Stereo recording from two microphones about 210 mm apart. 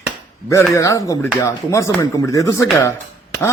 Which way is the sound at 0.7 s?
15° left (ahead or behind).